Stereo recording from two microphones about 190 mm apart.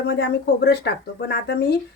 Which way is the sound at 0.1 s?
60° left (ahead or behind).